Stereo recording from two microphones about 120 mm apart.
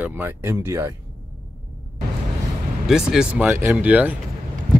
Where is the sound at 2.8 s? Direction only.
5° right (ahead or behind).